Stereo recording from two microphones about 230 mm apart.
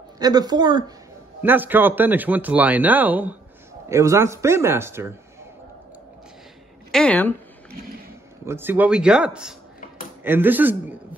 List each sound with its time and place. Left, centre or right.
0.2 s speech: centre
6.9 s speech: centre
8.5 s speech: centre